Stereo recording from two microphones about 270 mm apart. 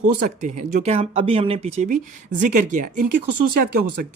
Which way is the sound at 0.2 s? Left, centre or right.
Right.